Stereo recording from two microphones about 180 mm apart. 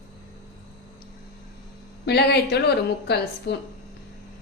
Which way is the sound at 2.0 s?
65° left (ahead or behind).